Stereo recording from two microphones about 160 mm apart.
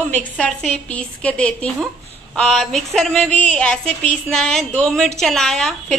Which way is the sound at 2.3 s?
5° left (ahead or behind).